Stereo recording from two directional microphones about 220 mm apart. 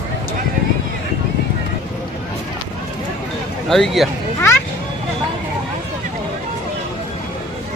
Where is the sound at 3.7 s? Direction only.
Centre (ahead or behind).